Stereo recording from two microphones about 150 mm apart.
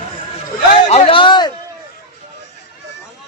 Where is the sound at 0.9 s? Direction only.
45° left (ahead or behind).